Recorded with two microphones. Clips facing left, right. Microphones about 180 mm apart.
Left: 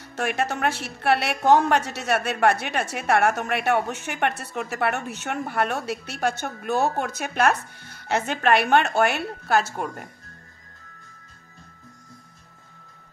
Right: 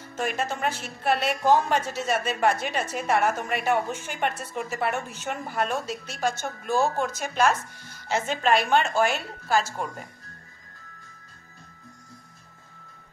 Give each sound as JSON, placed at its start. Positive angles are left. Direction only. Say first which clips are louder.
{"t": 0.0, "sound": "a woman's voice", "louder": "left 3 dB", "side_deg": 70}